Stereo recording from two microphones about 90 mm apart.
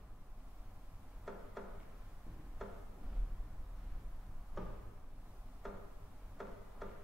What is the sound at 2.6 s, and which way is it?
Tick-tock, centre (ahead or behind).